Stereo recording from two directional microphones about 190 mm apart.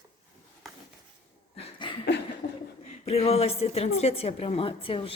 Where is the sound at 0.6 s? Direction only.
Centre (ahead or behind).